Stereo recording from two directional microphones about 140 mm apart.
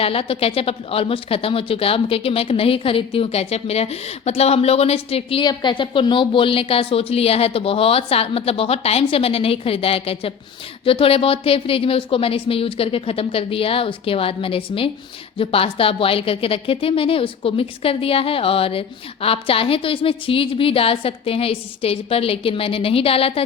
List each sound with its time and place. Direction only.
0.0 s a woman's voice: 45° left (ahead or behind)
5.4 s a woman's voice: 35° left (ahead or behind)